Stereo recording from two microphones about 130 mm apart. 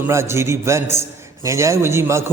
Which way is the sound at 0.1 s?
20° right (ahead or behind).